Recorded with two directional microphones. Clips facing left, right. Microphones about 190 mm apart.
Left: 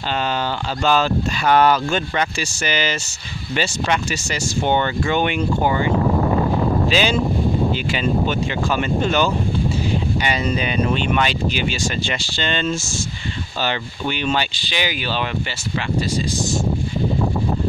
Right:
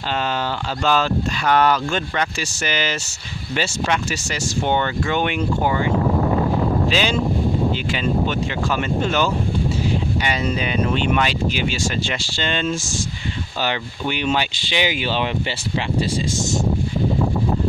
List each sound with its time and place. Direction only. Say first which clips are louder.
0.8 s speech: left 1 dB; centre (ahead or behind); by 15.0 s 25° right (ahead or behind)